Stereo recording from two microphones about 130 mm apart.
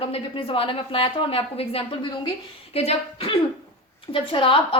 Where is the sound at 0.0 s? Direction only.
45° left (ahead or behind).